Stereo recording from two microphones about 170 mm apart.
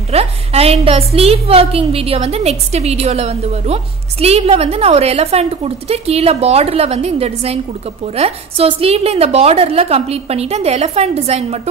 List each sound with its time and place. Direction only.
0.1 s a woman's voice: 35° right (ahead or behind)